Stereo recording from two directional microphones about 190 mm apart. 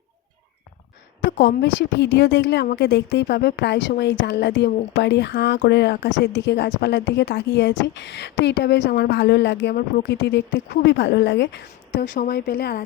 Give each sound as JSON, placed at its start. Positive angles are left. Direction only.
{"t": 1.4, "sound": "a woman's voice", "side_deg": 65}
{"t": 12.1, "sound": "a woman's voice", "side_deg": 50}